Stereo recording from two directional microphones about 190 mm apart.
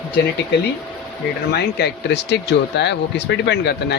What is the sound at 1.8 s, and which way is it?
Speech, 55° left (ahead or behind).